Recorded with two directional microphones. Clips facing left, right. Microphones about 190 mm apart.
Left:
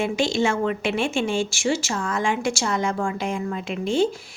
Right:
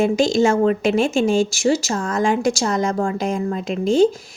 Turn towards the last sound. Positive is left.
turn(degrees=-40)  # may be behind; listen again after turning